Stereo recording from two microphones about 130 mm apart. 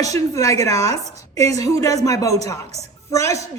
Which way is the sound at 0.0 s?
25° left (ahead or behind).